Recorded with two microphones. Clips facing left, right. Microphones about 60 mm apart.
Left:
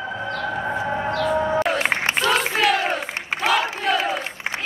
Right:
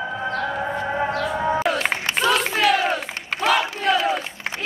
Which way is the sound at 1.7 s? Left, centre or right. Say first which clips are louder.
Left 2 dB; left.